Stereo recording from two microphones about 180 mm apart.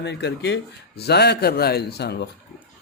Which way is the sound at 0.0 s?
75° left (ahead or behind).